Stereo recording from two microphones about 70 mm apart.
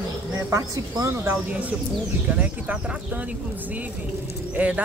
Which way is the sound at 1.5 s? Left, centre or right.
Centre.